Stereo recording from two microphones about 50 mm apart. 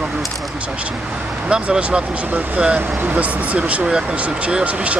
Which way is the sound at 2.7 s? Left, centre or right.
Right.